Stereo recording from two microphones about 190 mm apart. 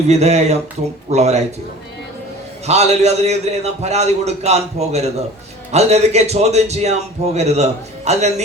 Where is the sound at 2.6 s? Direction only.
35° right (ahead or behind).